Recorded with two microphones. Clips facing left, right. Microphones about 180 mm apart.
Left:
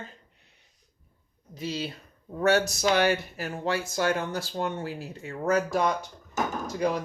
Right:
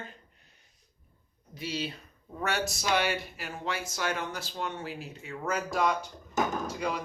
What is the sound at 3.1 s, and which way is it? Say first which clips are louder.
Speech: left 6 dB; 40° left (ahead or behind).